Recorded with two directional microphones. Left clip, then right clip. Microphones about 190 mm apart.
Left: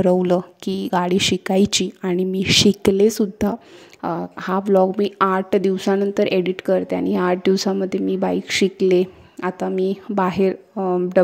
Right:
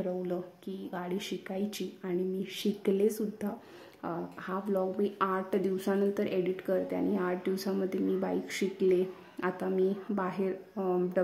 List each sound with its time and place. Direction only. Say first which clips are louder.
0.0 s speech: left 17 dB; 50° left (ahead or behind)